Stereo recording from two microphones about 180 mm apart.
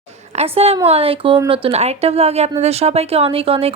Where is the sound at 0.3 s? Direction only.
35° right (ahead or behind).